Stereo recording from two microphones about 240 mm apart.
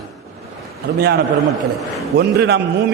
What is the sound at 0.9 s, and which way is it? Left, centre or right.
Speech, right.